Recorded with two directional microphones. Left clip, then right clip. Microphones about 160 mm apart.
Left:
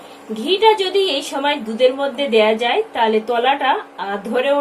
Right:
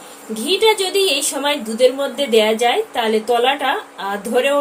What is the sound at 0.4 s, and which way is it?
A woman's voice, 5° left (ahead or behind).